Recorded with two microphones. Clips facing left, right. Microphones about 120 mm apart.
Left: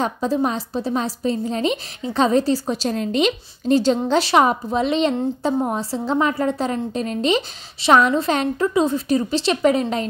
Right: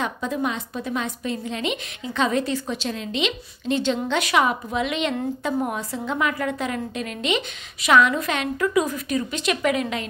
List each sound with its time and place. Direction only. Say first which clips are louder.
0.0 s a woman's voice: left 5 dB; 35° left (ahead or behind)